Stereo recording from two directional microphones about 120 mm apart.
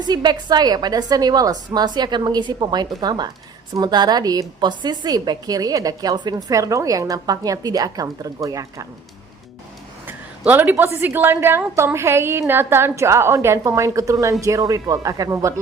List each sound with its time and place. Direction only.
0.0 s a woman's voice: 35° right (ahead or behind)
10.1 s a woman's voice: 15° right (ahead or behind)